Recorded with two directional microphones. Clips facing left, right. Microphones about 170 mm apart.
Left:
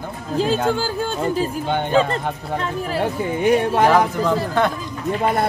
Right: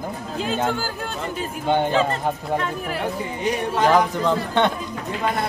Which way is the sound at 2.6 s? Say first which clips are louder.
Left 3 dB; 30° left (ahead or behind).